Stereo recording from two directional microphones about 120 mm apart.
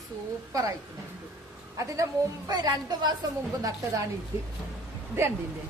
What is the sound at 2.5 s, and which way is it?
Speech, 35° right (ahead or behind).